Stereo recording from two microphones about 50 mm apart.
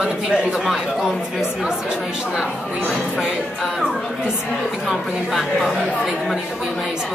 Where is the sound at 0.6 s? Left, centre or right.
Centre.